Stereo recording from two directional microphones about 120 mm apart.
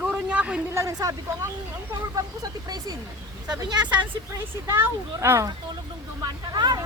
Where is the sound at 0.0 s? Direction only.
10° right (ahead or behind).